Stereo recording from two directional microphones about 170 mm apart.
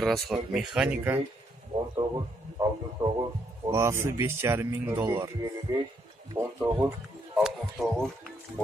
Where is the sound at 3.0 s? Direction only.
30° right (ahead or behind).